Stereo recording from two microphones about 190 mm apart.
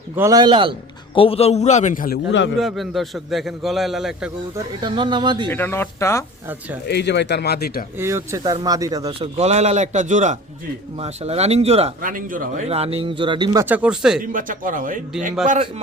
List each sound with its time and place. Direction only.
0.2 s speech: 20° right (ahead or behind)
1.1 s a man's voice: 30° left (ahead or behind); by 2.1 s 45° left (ahead or behind)
2.6 s a man's voice: centre (ahead or behind)
4.5 s speech: 25° right (ahead or behind)
5.5 s speech: 10° left (ahead or behind)
6.8 s speech: 60° left (ahead or behind)
7.9 s speech: 15° right (ahead or behind)
9.4 s a man's voice: 35° right (ahead or behind)
12.0 s a man's voice: 45° right (ahead or behind)
12.6 s speech: 30° right (ahead or behind)
13.7 s a man's voice: 5° right (ahead or behind)
14.2 s a man's voice: 45° right (ahead or behind)